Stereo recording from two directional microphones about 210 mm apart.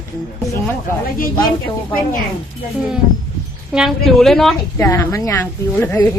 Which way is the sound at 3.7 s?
Centre (ahead or behind).